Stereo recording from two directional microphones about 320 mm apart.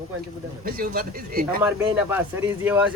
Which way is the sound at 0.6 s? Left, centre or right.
Right.